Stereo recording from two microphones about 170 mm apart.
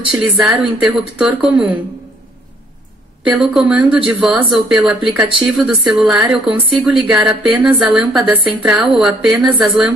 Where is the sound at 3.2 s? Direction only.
5° right (ahead or behind).